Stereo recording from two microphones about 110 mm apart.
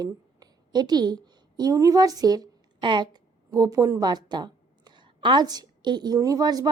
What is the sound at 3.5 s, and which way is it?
Speech, 30° right (ahead or behind).